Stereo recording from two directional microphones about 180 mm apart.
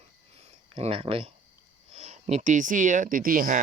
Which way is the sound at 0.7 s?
30° right (ahead or behind).